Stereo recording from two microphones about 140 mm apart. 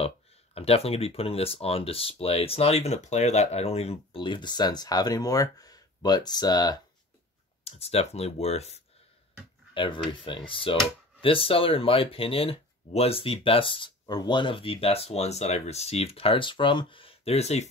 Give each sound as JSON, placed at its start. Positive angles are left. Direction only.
{"t": 0.6, "sound": "speech", "side_deg": 45}
{"t": 7.6, "sound": "speech", "side_deg": 45}
{"t": 9.8, "sound": "speech", "side_deg": 35}